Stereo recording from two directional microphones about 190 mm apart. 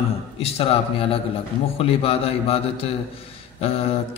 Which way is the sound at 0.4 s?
30° left (ahead or behind).